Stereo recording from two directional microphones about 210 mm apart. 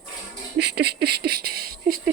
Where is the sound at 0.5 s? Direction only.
50° right (ahead or behind).